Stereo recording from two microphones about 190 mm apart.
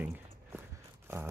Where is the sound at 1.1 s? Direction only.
15° right (ahead or behind).